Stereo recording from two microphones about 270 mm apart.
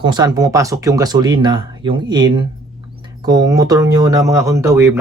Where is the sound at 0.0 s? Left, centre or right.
Centre.